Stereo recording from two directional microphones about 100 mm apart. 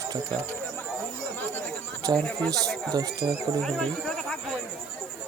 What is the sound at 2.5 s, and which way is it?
Speech, 5° left (ahead or behind).